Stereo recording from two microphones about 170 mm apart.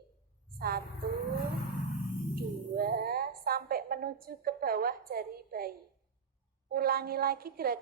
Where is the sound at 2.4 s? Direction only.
60° right (ahead or behind).